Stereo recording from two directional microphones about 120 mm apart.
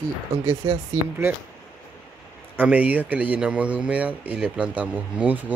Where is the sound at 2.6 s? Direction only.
10° right (ahead or behind).